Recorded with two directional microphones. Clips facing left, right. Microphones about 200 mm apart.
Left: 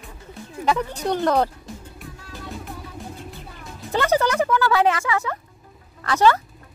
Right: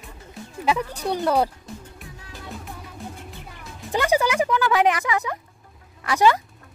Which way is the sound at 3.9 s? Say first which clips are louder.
Left 1 dB; 10° right (ahead or behind).